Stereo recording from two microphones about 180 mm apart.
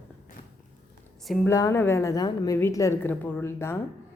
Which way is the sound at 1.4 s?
15° left (ahead or behind).